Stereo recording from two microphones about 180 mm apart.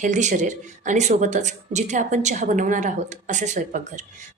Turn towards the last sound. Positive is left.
turn(degrees=-45)  # may be behind; listen again after turning